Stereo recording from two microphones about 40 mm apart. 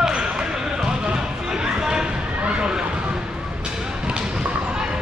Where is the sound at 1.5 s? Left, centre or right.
Centre.